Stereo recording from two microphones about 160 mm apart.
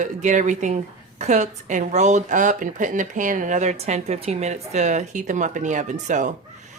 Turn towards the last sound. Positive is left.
turn(degrees=-50)  # may be behind; listen again after turning